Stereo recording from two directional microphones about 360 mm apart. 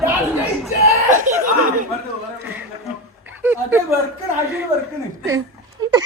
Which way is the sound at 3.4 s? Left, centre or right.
Centre.